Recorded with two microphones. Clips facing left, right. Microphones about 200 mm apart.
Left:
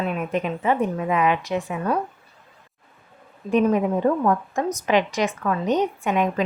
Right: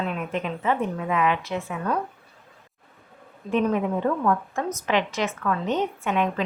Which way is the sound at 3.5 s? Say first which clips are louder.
Left 4 dB; 15° left (ahead or behind).